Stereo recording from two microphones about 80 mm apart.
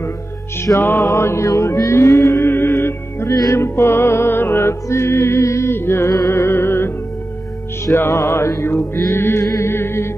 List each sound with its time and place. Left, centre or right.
0.7 s music: left
3.3 s music: left